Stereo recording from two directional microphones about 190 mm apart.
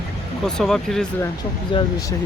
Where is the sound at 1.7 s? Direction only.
25° left (ahead or behind).